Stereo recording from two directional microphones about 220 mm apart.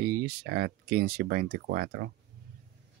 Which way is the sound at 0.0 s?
45° right (ahead or behind).